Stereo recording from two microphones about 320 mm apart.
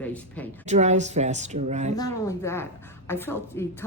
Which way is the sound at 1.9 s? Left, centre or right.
Centre.